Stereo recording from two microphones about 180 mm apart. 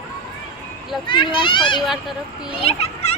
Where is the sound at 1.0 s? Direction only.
25° left (ahead or behind).